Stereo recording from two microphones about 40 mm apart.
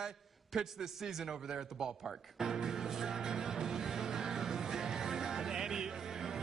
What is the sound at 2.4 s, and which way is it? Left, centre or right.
Music, centre.